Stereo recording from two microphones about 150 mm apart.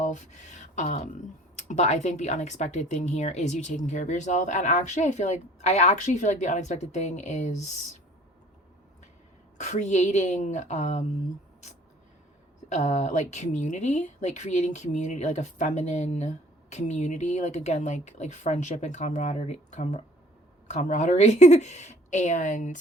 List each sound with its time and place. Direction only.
0.0 s speech: 50° left (ahead or behind)
9.6 s speech: 50° left (ahead or behind)
12.6 s speech: 50° left (ahead or behind)